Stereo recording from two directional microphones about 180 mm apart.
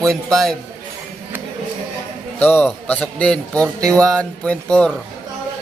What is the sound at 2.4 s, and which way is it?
Speech, 10° left (ahead or behind).